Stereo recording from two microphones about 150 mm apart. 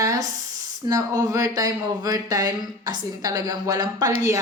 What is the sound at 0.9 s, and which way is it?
Speech, 25° right (ahead or behind).